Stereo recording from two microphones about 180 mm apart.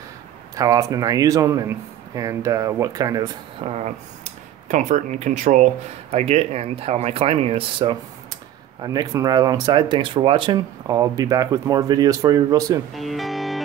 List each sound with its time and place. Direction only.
0.6 s speech: 20° right (ahead or behind)
3.6 s speech: 35° right (ahead or behind); by 12.8 s 20° right (ahead or behind)
12.9 s speech: centre (ahead or behind)